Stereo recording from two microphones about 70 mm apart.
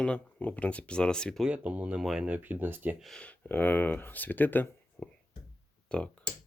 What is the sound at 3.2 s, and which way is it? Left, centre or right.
Speech, left.